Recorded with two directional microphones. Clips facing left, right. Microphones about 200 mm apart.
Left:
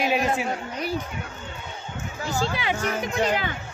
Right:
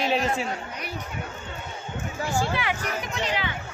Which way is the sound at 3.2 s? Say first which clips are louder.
Left 5 dB; 45° left (ahead or behind).